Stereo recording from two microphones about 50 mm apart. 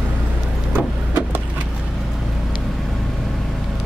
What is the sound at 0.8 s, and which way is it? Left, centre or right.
Vehicle, right.